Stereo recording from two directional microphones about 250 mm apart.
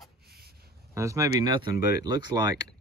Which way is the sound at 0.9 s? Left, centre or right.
Centre.